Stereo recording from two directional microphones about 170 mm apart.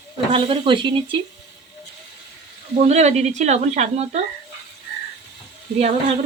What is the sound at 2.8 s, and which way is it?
Speech, 40° right (ahead or behind).